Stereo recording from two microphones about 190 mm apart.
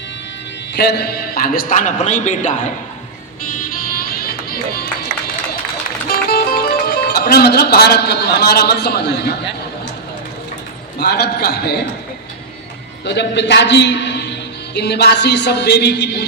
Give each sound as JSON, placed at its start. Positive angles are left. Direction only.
{"t": 0.7, "sound": "a man's voice", "side_deg": 60}
{"t": 3.4, "sound": "music", "side_deg": 45}
{"t": 6.1, "sound": "speech", "side_deg": 55}
{"t": 11.0, "sound": "speech", "side_deg": 60}
{"t": 13.1, "sound": "speech", "side_deg": 65}